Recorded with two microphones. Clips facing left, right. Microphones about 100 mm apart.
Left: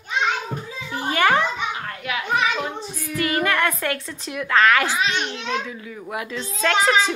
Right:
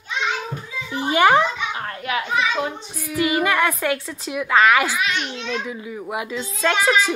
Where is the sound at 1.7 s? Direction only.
30° right (ahead or behind).